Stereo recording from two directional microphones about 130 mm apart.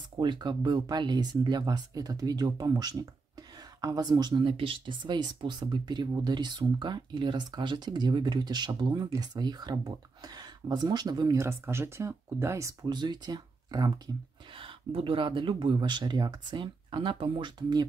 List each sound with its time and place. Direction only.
0.2 s speech: 35° right (ahead or behind)